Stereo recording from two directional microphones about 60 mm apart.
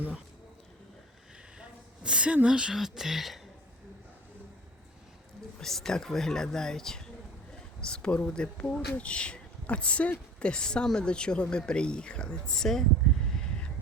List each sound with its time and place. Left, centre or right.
2.0 s a woman's voice: centre
5.5 s speech: centre